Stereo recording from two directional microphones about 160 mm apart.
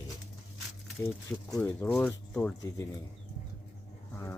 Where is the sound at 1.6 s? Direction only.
10° left (ahead or behind).